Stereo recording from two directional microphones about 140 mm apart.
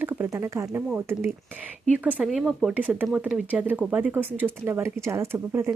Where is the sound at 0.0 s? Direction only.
15° right (ahead or behind).